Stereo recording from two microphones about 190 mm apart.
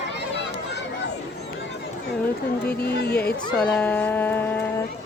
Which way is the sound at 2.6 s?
60° left (ahead or behind).